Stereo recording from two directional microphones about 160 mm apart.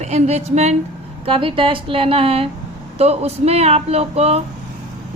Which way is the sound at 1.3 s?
35° right (ahead or behind).